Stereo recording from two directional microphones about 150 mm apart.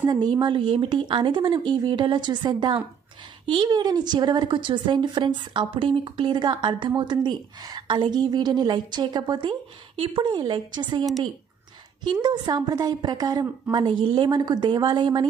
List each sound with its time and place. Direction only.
0.0 s a woman's voice: 25° right (ahead or behind)